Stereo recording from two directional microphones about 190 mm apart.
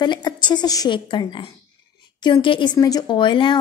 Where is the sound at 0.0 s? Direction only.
25° left (ahead or behind).